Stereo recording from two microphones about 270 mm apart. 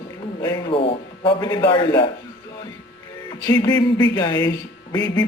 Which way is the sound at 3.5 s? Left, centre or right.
Centre.